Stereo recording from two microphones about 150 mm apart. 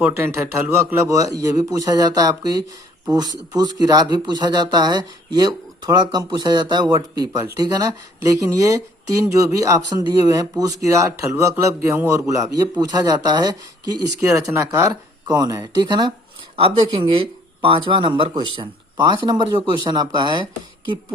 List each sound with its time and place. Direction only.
0.2 s speech: 20° right (ahead or behind)